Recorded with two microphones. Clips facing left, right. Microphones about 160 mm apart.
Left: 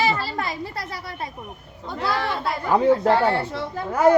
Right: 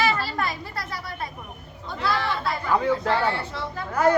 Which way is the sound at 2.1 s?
45° left (ahead or behind).